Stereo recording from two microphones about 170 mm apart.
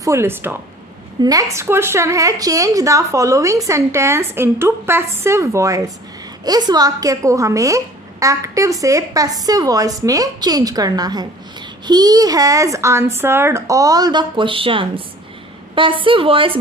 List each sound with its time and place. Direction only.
0.0 s a woman's voice: 15° right (ahead or behind); by 16.6 s 30° right (ahead or behind)